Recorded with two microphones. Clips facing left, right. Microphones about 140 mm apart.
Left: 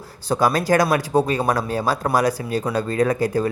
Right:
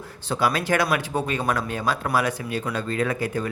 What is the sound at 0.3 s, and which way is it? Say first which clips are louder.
Speech: left 5 dB; 40° left (ahead or behind).